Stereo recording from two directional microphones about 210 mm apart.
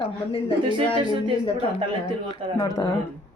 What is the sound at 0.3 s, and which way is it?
Speech, 25° left (ahead or behind).